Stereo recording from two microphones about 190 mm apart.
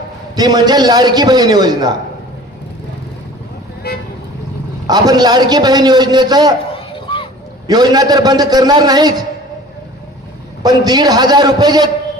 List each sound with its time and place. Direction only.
0.3 s a man's voice: 20° right (ahead or behind)
4.9 s a man's voice: 20° right (ahead or behind)
6.7 s a sound: 30° left (ahead or behind)
7.7 s a man's voice: 20° right (ahead or behind)
10.6 s a man's voice: 20° right (ahead or behind)